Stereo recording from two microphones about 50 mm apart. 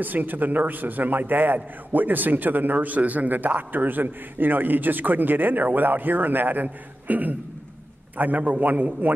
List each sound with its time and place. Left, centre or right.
0.0 s a man's voice: right